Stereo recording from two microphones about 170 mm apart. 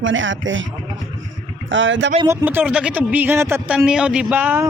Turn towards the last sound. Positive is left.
turn(degrees=-10)  # may be behind; listen again after turning